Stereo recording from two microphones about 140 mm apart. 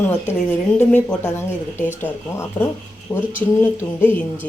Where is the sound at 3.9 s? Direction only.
15° left (ahead or behind).